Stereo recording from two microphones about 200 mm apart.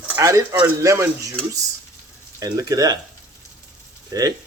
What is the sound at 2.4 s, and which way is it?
Speech, 15° right (ahead or behind).